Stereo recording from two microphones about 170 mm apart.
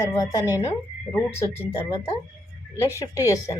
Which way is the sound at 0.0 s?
20° left (ahead or behind).